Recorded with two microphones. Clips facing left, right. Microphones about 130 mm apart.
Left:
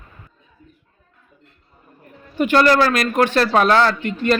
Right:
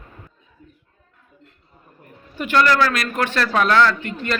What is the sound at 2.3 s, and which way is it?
Speech, 25° left (ahead or behind).